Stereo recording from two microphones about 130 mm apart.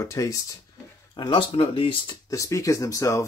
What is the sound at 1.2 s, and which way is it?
Speech, 40° left (ahead or behind).